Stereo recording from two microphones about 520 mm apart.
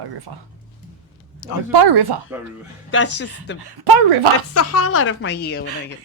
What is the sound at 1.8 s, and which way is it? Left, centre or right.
Speech, right.